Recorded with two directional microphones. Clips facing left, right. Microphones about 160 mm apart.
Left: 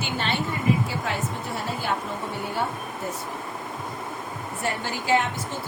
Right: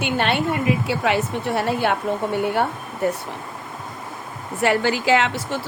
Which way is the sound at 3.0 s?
70° right (ahead or behind).